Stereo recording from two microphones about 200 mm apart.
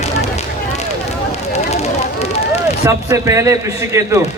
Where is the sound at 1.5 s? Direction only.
30° left (ahead or behind).